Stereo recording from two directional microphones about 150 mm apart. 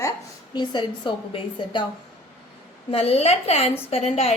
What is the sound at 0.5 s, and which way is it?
A woman's voice, 30° left (ahead or behind).